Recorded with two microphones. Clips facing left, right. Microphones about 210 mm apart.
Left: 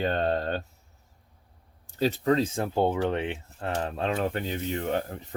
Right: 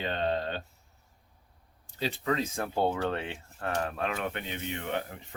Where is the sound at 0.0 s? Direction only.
45° left (ahead or behind).